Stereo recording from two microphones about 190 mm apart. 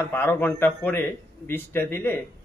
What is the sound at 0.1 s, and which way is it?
A man's voice, 10° left (ahead or behind).